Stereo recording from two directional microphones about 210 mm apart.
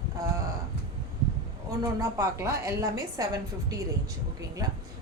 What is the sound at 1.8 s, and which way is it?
A woman's voice, 15° right (ahead or behind).